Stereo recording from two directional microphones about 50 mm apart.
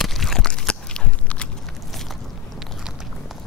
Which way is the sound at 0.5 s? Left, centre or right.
Centre.